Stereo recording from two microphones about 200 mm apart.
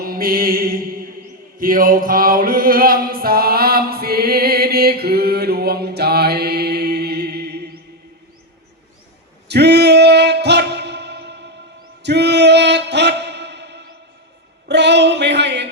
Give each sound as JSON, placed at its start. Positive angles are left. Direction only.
{"t": 0.0, "sound": "mantra", "side_deg": -45}
{"t": 1.5, "sound": "chant", "side_deg": -45}
{"t": 9.5, "sound": "music", "side_deg": -55}